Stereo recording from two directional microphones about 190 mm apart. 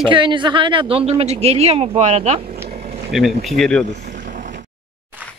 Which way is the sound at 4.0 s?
40° right (ahead or behind).